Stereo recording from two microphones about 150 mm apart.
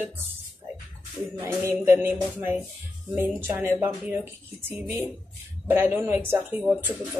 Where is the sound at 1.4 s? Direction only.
15° right (ahead or behind).